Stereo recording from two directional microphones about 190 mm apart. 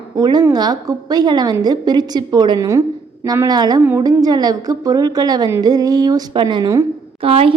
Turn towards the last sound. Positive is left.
turn(degrees=-30)  # may be behind; listen again after turning